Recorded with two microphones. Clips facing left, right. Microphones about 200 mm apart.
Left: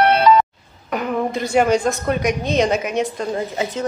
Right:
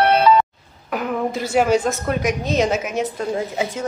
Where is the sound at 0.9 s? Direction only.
5° right (ahead or behind).